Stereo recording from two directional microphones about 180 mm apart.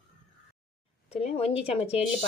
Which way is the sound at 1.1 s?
35° left (ahead or behind).